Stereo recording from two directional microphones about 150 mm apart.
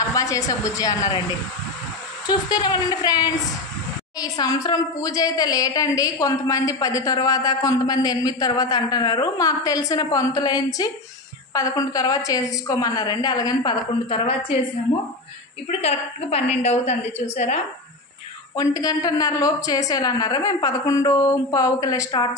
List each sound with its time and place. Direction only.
0.0 s a woman's voice: 20° left (ahead or behind)
2.2 s a woman's voice: 25° left (ahead or behind)
15.8 s a woman's voice: 40° left (ahead or behind)
18.6 s a woman's voice: 25° left (ahead or behind)